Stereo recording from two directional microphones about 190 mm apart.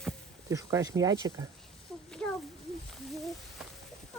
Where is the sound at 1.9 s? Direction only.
5° left (ahead or behind).